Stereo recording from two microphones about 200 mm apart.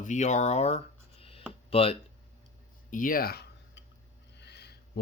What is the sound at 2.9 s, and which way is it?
Tick-tock, 45° left (ahead or behind).